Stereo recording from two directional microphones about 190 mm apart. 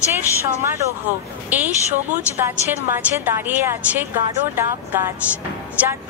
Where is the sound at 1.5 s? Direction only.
10° right (ahead or behind).